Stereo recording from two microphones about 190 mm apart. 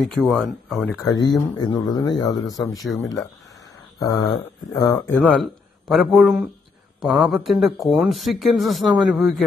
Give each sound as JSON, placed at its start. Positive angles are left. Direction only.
{"t": 0.0, "sound": "speech", "side_deg": 0}
{"t": 1.0, "sound": "speech", "side_deg": 20}
{"t": 4.0, "sound": "speech", "side_deg": 20}